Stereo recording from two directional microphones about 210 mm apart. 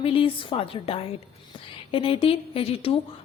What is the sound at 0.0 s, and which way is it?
A woman's voice, 25° left (ahead or behind).